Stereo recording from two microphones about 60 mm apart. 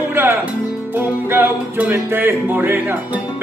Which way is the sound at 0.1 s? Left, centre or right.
Right.